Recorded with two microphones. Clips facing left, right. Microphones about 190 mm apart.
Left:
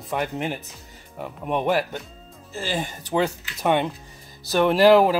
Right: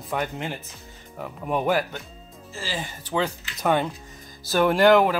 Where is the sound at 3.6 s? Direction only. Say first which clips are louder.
Left 1 dB; 20° left (ahead or behind).